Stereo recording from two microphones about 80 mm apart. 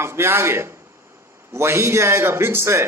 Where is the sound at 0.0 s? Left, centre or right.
Right.